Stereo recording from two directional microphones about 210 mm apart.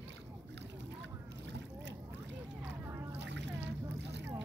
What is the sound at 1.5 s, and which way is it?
Boat, 55° right (ahead or behind).